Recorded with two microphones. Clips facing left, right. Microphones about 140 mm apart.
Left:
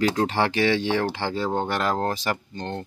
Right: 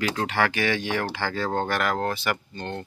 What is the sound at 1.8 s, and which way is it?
Speech, 30° left (ahead or behind).